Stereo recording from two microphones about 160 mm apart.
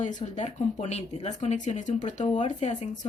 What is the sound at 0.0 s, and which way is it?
Speech, 50° left (ahead or behind).